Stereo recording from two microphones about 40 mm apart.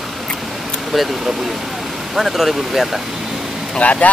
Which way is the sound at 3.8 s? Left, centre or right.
Left.